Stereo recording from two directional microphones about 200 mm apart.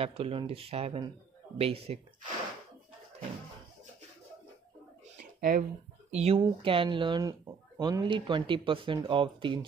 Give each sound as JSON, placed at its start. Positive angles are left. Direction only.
{"t": 0.0, "sound": "speech", "side_deg": -30}
{"t": 5.4, "sound": "speech", "side_deg": -40}
{"t": 6.1, "sound": "speech", "side_deg": -30}